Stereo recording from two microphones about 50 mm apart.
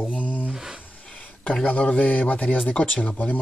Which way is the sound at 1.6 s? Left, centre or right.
Left.